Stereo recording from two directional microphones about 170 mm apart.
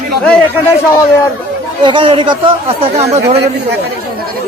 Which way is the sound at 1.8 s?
30° right (ahead or behind).